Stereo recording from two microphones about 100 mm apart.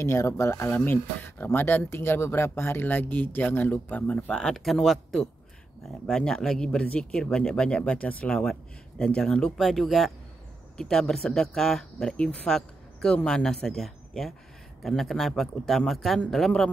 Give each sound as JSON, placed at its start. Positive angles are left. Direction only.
{"t": 0.0, "sound": "speech", "side_deg": 30}
{"t": 0.7, "sound": "speech", "side_deg": 20}